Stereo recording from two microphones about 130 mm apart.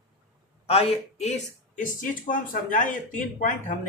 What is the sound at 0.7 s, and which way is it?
Speech, 50° left (ahead or behind).